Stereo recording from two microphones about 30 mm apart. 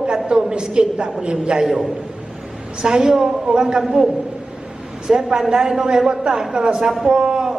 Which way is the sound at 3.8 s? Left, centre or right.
Centre.